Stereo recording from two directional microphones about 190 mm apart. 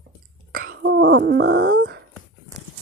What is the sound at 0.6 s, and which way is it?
Groan, 70° right (ahead or behind).